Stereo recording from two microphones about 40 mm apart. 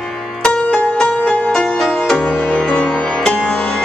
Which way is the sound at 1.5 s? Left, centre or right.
Left.